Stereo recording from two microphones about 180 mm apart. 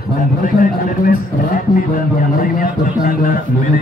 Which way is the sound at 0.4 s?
50° left (ahead or behind).